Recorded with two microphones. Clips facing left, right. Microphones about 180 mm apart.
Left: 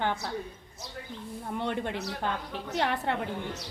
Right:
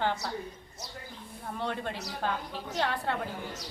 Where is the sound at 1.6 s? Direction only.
20° left (ahead or behind).